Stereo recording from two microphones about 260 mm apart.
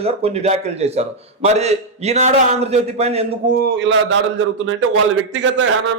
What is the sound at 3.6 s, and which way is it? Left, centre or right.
Speech, right.